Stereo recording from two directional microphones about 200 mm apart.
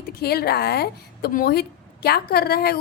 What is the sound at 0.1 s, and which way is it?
A woman's voice, 50° left (ahead or behind).